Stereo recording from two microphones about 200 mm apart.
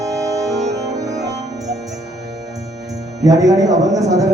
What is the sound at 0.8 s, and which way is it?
Music, 15° right (ahead or behind).